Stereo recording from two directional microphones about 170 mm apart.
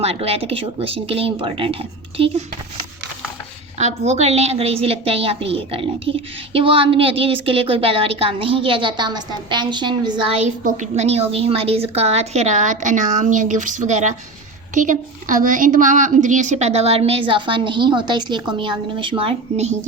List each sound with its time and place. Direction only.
0.0 s a woman's voice: 35° right (ahead or behind)
3.8 s a woman's voice: 40° right (ahead or behind)